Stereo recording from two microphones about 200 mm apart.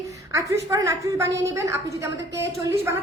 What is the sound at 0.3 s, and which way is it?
A woman's voice, 15° right (ahead or behind).